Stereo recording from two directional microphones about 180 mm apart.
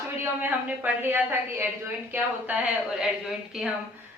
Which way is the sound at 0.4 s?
10° right (ahead or behind).